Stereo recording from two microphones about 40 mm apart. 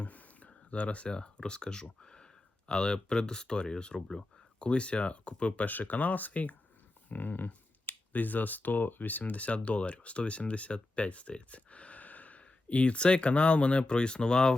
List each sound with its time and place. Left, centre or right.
0.0 s speech: left
5.6 s speech: left